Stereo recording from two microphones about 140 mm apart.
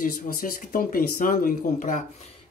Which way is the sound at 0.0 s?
85° left.